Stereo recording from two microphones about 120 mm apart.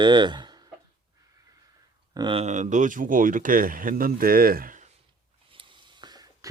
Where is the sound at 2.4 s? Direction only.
80° right.